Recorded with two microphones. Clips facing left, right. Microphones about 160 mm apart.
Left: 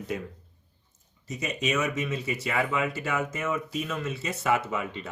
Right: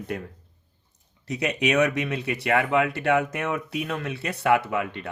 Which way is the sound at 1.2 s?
70° right (ahead or behind).